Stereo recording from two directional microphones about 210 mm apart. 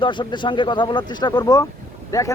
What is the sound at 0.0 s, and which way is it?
Speech, 20° left (ahead or behind).